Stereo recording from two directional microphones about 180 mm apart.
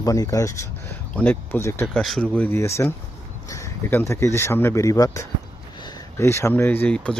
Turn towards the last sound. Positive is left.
turn(degrees=5)  # may be behind; listen again after turning